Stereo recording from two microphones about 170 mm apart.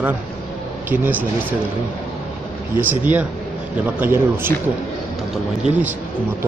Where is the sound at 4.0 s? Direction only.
10° right (ahead or behind).